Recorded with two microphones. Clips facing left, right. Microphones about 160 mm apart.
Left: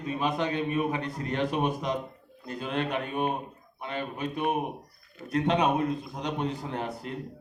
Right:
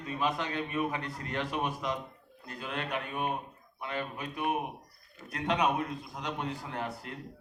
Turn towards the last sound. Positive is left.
turn(degrees=20)  # may be behind; listen again after turning